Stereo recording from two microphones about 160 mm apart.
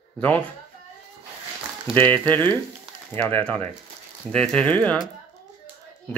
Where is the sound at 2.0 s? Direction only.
10° left (ahead or behind).